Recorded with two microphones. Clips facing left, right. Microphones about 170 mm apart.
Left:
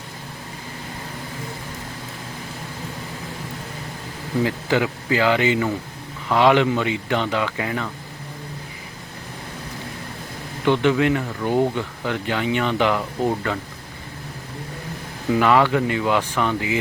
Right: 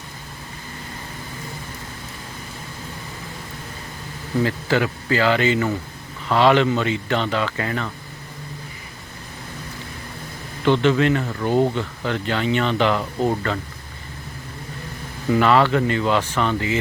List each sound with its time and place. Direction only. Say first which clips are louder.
4.4 s speech: even; 15° left (ahead or behind)
10.7 s speech: right 1 dB; 15° left (ahead or behind)
15.3 s speech: right 1 dB; 10° left (ahead or behind)